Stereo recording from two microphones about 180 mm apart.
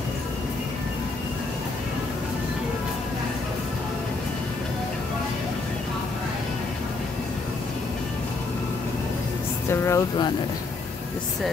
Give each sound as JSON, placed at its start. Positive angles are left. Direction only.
{"t": 9.7, "sound": "speech", "side_deg": 15}